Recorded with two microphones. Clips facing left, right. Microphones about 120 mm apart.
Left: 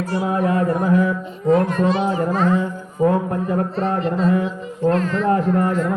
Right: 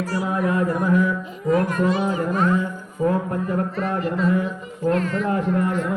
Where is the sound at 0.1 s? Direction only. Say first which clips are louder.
Left 4 dB; 25° left (ahead or behind).